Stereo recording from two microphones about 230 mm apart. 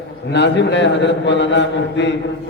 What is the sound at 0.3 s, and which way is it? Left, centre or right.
A man's voice, left.